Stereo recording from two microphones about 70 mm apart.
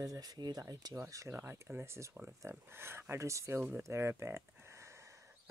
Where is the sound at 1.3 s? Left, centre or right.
Right.